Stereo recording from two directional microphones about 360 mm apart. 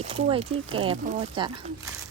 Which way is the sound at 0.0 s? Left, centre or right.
Centre.